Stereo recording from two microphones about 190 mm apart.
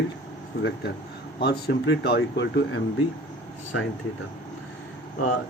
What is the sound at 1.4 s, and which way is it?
Speech, 60° left (ahead or behind).